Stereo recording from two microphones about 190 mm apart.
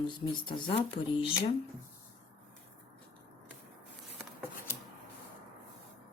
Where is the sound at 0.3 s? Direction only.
25° left (ahead or behind).